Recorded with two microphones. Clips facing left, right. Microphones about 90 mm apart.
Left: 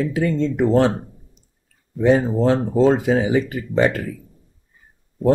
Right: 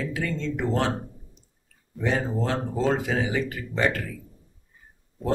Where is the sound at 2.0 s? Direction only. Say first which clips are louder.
Left 10 dB; 20° left (ahead or behind).